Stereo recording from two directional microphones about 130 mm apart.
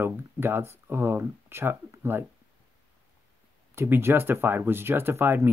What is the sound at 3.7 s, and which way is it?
Speech, 20° right (ahead or behind).